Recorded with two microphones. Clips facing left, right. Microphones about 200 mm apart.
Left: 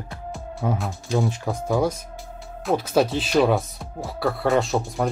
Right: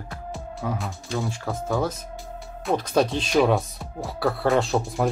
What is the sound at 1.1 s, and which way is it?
Speech, 15° left (ahead or behind).